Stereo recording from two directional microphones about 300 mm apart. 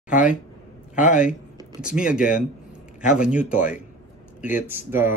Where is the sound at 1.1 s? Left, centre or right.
Centre.